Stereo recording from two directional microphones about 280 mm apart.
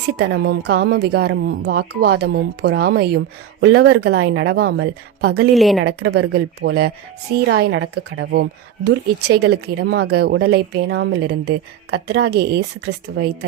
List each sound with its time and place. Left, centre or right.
0.2 s speech: right
5.5 s a woman's voice: centre
5.8 s a woman's voice: right
6.3 s speech: right